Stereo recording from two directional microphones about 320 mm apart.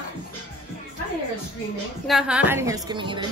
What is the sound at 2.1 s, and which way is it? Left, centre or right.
Speech, centre.